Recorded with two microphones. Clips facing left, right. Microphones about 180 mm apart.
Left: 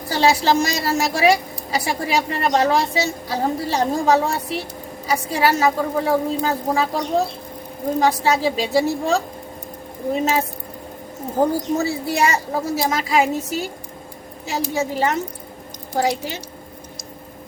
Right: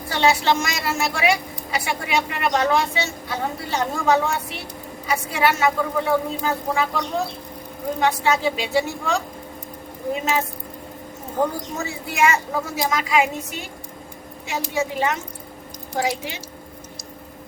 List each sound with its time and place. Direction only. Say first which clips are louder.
0.1 s a woman's voice: left 2 dB; 35° left (ahead or behind)